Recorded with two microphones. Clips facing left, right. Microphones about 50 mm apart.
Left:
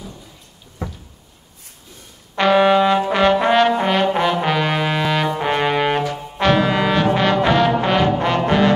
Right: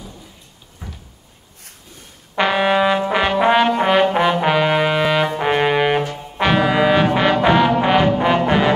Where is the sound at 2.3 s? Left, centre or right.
Centre.